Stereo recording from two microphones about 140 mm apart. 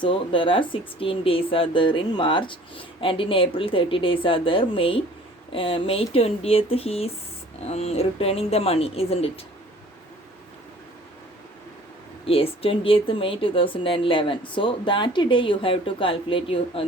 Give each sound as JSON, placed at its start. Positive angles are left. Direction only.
{"t": 0.0, "sound": "speech", "side_deg": 35}
{"t": 12.2, "sound": "speech", "side_deg": 45}